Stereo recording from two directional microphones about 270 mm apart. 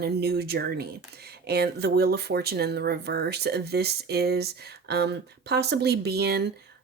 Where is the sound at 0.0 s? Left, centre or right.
Right.